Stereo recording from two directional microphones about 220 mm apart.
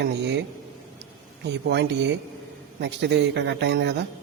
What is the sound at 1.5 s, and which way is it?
A man's voice, 50° right (ahead or behind).